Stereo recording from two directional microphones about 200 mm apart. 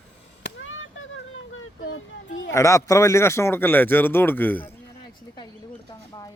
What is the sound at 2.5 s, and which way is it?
Speech, 15° left (ahead or behind).